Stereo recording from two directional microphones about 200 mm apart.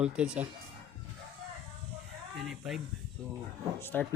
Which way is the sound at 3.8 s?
10° left (ahead or behind).